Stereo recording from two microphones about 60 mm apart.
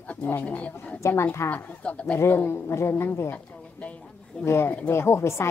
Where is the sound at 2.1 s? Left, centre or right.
Left.